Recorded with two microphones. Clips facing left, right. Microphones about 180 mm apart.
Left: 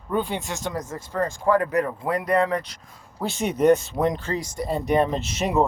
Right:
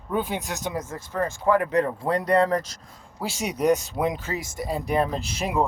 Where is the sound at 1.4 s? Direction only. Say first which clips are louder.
Even; 20° right (ahead or behind); by 2.6 s 40° right (ahead or behind).